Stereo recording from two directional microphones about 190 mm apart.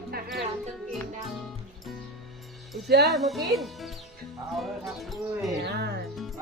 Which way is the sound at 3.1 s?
Centre (ahead or behind).